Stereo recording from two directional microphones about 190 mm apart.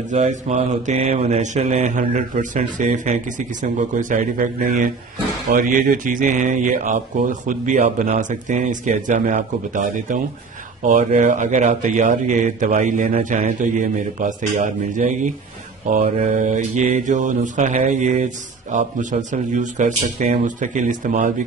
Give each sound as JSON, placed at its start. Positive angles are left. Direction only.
{"t": 0.1, "sound": "mantra", "side_deg": -40}
{"t": 5.5, "sound": "speech", "side_deg": -45}
{"t": 10.8, "sound": "mantra", "side_deg": -40}